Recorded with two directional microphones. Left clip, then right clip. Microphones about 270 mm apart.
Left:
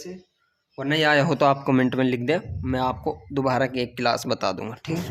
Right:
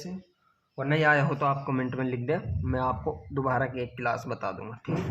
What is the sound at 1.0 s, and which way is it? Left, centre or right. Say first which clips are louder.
Speech: left 5 dB; left.